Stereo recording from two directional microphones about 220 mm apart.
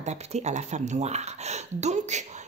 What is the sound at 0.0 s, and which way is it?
Speech, 30° right (ahead or behind).